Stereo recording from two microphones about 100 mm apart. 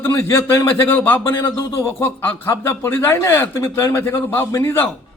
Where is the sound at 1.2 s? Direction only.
30° left (ahead or behind).